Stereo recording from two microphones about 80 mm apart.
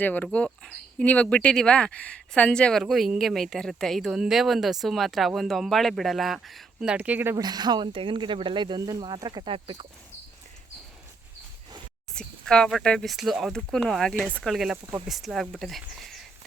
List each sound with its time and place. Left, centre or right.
0.0 s speech: centre
2.8 s speech: centre
6.7 s speech: centre
7.3 s speech: right
12.1 s a sound: centre
12.8 s speech: centre
13.1 s speech: centre
14.2 s speech: right
14.4 s speech: centre